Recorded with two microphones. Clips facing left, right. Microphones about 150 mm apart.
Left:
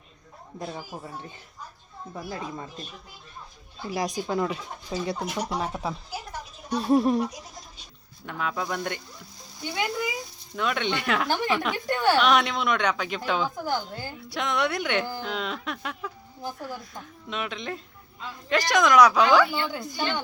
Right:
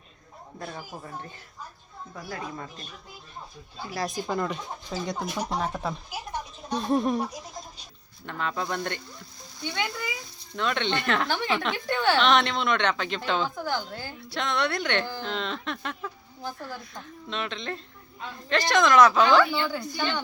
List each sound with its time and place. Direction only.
0.6 s speech: 15° left (ahead or behind)
2.1 s speech: 20° left (ahead or behind)
3.9 s speech: 15° left (ahead or behind)
4.2 s speech: 5° left (ahead or behind)
6.7 s speech: 10° left (ahead or behind)
8.3 s speech: 10° left (ahead or behind)
16.4 s speech: 10° left (ahead or behind)